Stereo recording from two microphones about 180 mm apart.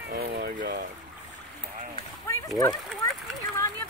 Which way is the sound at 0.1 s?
60° right (ahead or behind).